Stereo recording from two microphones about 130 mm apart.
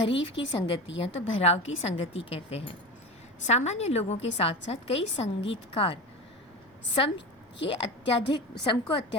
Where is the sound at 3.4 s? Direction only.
60° left (ahead or behind).